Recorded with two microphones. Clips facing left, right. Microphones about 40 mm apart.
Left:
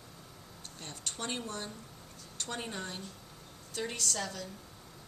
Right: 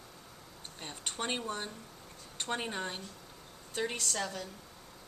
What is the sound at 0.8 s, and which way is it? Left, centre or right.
A woman's voice, right.